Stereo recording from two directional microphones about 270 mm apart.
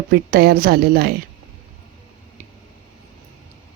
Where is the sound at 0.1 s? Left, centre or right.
Right.